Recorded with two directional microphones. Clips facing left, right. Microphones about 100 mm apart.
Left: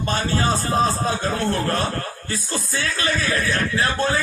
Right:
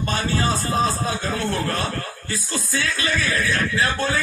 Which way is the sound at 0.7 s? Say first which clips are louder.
Left 2 dB; 35° left (ahead or behind).